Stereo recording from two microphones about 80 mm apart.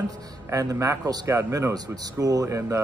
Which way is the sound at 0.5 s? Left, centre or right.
Right.